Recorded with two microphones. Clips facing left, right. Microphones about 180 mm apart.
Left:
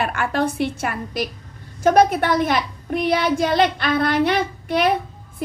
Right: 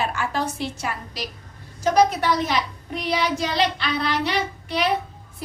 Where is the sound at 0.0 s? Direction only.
60° left (ahead or behind).